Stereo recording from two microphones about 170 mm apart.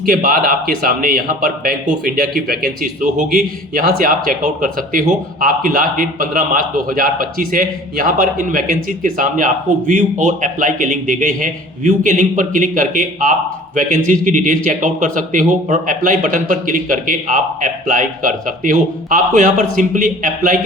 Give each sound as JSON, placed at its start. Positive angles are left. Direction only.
{"t": 0.0, "sound": "a man's voice", "side_deg": -55}